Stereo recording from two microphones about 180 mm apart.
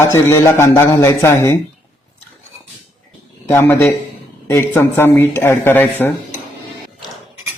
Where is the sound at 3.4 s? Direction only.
15° left (ahead or behind).